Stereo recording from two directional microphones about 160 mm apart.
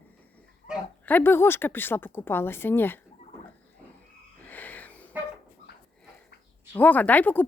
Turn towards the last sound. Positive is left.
turn(degrees=10)  # may be behind; listen again after turning